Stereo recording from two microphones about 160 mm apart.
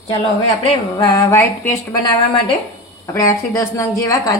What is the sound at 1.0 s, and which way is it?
A woman's voice, 20° left (ahead or behind).